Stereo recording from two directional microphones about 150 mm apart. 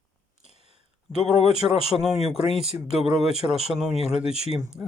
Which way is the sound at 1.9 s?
5° right (ahead or behind).